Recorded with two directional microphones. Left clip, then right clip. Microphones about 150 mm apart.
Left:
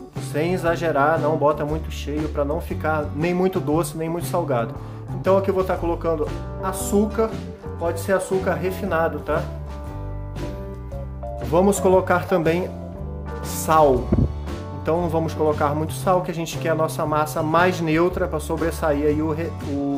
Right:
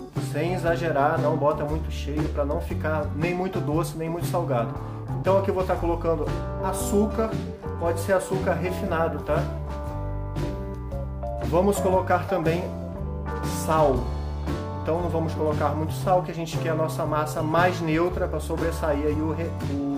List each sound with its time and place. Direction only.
0.3 s speech: 40° left (ahead or behind)
11.5 s speech: 40° left (ahead or behind)
13.4 s music: centre (ahead or behind)
14.9 s speech: 50° left (ahead or behind)